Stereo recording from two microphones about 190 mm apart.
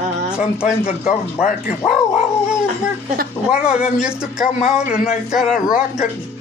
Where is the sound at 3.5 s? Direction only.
5° right (ahead or behind).